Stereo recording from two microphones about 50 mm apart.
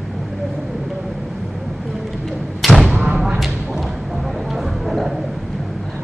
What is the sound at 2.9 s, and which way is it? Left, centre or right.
Thump, right.